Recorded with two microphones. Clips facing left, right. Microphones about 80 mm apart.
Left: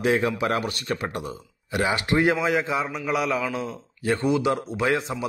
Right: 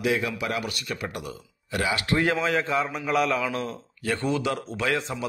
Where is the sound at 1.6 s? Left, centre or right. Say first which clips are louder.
Left 2 dB; left.